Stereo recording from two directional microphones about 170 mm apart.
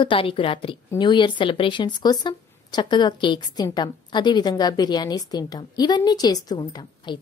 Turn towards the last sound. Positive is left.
turn(degrees=25)  # may be behind; listen again after turning